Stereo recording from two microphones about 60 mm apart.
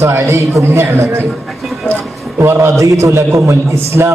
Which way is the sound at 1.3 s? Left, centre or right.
Centre.